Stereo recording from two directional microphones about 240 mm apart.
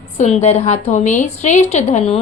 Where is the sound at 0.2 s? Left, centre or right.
Left.